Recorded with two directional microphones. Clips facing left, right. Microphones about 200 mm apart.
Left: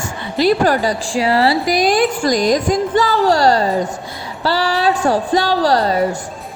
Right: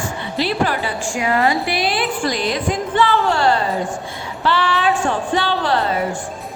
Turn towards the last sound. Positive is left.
turn(degrees=40)  # may be behind; listen again after turning